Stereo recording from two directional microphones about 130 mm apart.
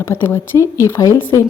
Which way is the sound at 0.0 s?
20° left (ahead or behind).